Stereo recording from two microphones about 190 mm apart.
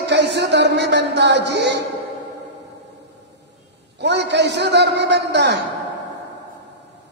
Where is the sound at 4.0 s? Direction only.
65° right (ahead or behind).